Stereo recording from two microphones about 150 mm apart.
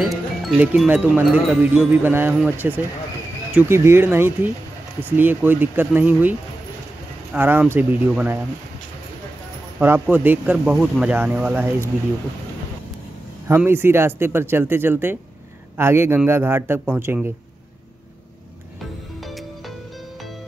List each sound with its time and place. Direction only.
0.0 s music: centre (ahead or behind)
0.6 s speech: 10° right (ahead or behind)
7.3 s speech: 15° right (ahead or behind)
9.8 s speech: 15° right (ahead or behind)
13.6 s speech: 15° right (ahead or behind)